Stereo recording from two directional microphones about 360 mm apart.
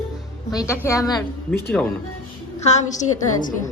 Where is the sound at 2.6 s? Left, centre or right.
Centre.